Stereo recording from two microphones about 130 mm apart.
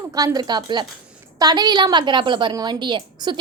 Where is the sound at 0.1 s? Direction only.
30° right (ahead or behind).